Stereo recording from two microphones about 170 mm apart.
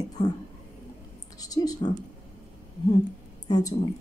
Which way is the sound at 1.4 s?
20° left (ahead or behind).